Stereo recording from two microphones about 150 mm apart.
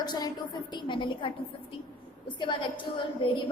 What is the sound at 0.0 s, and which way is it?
A woman's voice, 25° left (ahead or behind).